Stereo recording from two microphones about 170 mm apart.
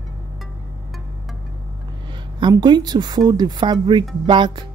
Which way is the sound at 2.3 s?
25° right (ahead or behind).